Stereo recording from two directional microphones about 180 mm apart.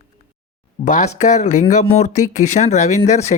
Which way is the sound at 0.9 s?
40° left (ahead or behind).